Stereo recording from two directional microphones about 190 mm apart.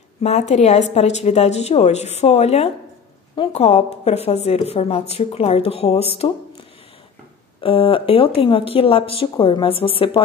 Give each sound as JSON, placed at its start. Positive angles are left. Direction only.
{"t": 0.2, "sound": "speech", "side_deg": 35}
{"t": 7.6, "sound": "speech", "side_deg": 30}